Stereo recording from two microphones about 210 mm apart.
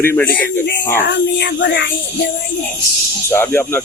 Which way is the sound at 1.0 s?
55° left (ahead or behind).